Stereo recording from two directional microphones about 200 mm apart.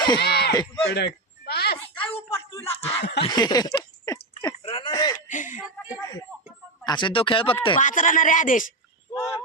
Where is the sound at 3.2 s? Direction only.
20° left (ahead or behind).